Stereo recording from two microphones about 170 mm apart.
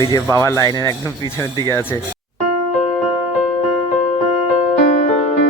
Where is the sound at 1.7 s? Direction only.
15° left (ahead or behind).